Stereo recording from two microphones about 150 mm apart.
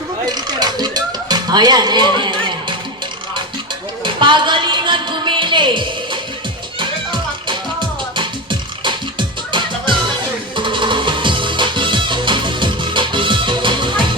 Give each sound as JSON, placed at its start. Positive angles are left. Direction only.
{"t": 0.3, "sound": "music", "side_deg": -30}
{"t": 4.0, "sound": "music", "side_deg": -30}